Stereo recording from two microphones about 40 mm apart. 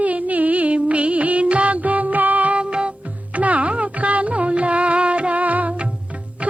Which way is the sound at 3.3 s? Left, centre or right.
Right.